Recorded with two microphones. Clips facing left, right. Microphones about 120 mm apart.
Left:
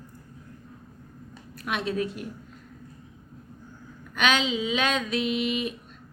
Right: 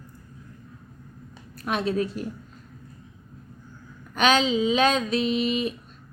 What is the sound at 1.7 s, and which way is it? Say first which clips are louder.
Speech: right 3 dB; 35° right (ahead or behind).